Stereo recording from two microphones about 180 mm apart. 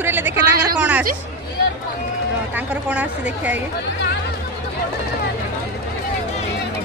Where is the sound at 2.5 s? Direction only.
5° right (ahead or behind).